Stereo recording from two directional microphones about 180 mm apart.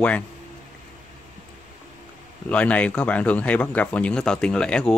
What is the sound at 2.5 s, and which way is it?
Speech, 5° left (ahead or behind).